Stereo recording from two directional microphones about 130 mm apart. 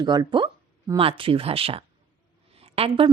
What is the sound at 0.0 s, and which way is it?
Speech, 35° right (ahead or behind).